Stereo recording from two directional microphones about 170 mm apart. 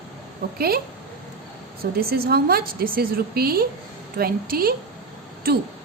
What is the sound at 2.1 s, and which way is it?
A woman's voice, 65° right (ahead or behind).